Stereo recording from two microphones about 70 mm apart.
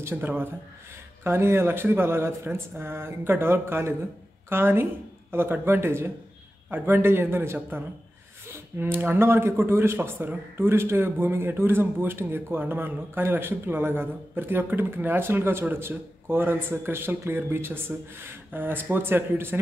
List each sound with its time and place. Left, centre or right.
0.1 s speech: right
1.2 s a man's voice: right